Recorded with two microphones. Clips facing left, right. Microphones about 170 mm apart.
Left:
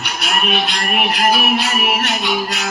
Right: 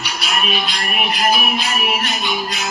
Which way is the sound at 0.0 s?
55° left (ahead or behind).